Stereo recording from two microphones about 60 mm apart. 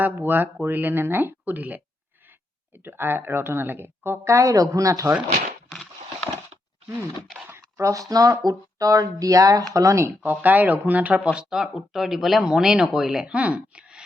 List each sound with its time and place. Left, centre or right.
0.0 s a woman's voice: right
7.8 s speech: right
9.7 s speech: right
10.4 s speech: right
11.3 s speech: centre
13.2 s speech: right